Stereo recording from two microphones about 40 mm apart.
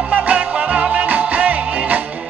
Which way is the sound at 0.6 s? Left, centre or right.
Right.